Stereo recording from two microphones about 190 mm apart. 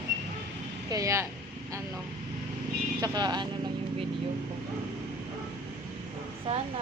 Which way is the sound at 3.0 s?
20° right (ahead or behind).